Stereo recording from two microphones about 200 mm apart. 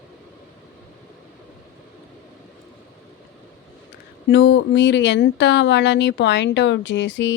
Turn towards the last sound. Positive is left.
turn(degrees=65)  # may be behind; listen again after turning